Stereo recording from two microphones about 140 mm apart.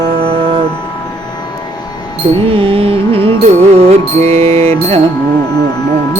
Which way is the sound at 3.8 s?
50° right (ahead or behind).